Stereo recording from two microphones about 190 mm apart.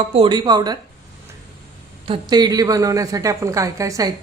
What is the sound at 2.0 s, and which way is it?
A woman's voice, 25° right (ahead or behind).